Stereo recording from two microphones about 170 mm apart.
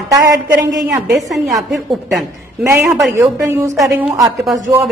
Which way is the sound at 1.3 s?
Centre (ahead or behind).